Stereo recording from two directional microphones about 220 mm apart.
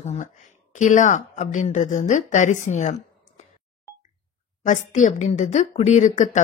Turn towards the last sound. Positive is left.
turn(degrees=35)  # may be behind; listen again after turning